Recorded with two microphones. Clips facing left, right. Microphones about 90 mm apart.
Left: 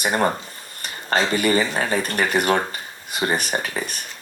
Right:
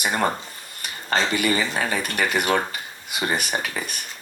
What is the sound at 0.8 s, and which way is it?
Speech, 35° left (ahead or behind).